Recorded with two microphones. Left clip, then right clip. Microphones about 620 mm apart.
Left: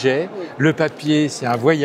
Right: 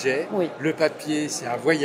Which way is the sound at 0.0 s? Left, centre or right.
Left.